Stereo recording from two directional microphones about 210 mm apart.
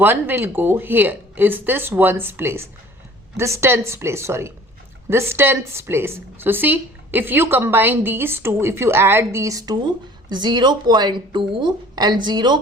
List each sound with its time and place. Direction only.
0.0 s speech: 10° right (ahead or behind)